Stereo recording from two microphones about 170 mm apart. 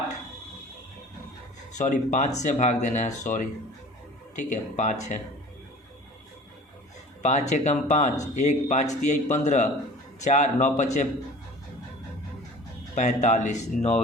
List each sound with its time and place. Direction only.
1.8 s speech: 45° left (ahead or behind)
7.2 s speech: 45° left (ahead or behind)
12.9 s speech: 45° left (ahead or behind)